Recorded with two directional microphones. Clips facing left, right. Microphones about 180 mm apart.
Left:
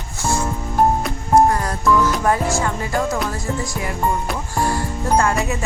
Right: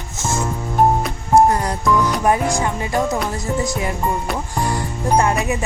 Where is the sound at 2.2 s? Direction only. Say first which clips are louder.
Right 1 dB; 20° right (ahead or behind).